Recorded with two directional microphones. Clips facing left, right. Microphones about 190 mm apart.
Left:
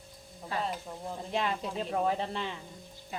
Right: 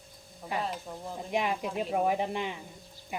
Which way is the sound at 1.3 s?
15° right (ahead or behind).